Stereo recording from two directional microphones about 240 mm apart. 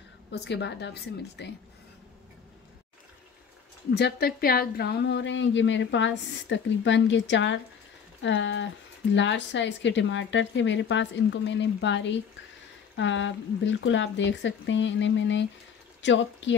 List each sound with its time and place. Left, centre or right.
0.3 s speech: left
3.9 s speech: left